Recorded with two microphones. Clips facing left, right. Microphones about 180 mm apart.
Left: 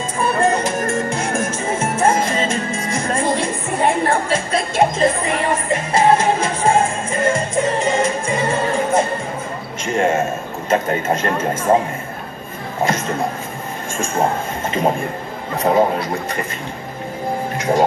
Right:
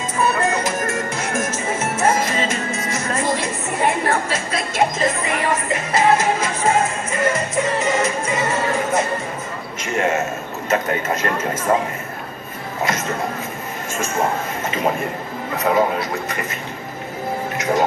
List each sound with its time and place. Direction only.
0.2 s music: 30° left (ahead or behind)
9.9 s a sound: 30° left (ahead or behind)
10.7 s speech: 30° left (ahead or behind)
15.5 s a man's voice: 30° left (ahead or behind)
17.6 s music: 30° left (ahead or behind)